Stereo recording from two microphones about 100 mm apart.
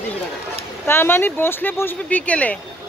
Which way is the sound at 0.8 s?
25° left (ahead or behind).